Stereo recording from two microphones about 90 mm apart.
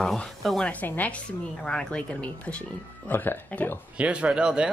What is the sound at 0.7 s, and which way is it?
Speech, 15° left (ahead or behind).